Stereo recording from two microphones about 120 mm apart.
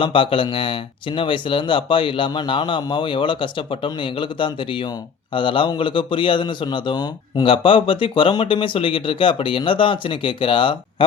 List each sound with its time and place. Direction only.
0.0 s a man's voice: 45° left (ahead or behind)